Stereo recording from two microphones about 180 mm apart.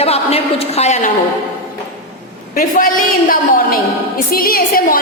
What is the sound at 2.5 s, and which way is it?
A woman's voice, 55° left (ahead or behind).